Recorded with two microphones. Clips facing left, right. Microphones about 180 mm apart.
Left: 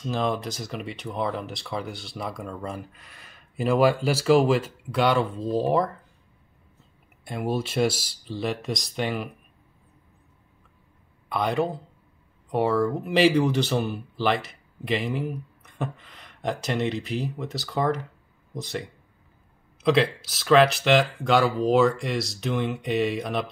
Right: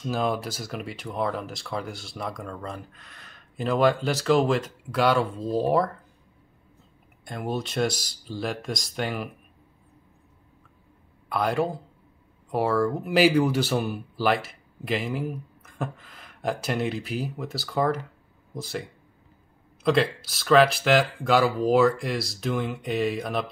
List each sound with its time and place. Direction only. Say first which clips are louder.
0.0 s speech: even; 5° right (ahead or behind)
7.2 s speech: left 3 dB; 5° left (ahead or behind)
11.2 s speech: even; centre (ahead or behind)